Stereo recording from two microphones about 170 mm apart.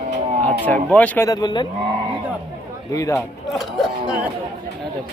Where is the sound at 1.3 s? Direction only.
25° left (ahead or behind).